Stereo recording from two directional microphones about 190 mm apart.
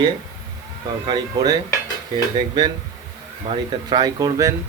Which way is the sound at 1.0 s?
25° right (ahead or behind).